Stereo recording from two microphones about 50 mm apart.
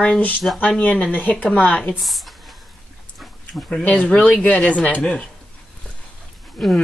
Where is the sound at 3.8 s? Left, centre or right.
Left.